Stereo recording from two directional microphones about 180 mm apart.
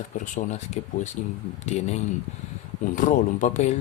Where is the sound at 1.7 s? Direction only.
40° left (ahead or behind).